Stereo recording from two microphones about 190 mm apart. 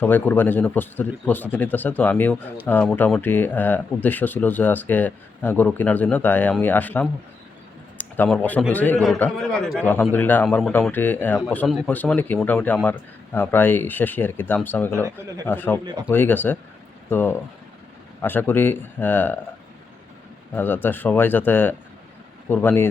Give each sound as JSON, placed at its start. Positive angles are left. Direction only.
{"t": 0.0, "sound": "a man's voice", "side_deg": 10}
{"t": 14.9, "sound": "speech", "side_deg": -15}
{"t": 15.4, "sound": "speech", "side_deg": 10}
{"t": 20.6, "sound": "speech", "side_deg": 10}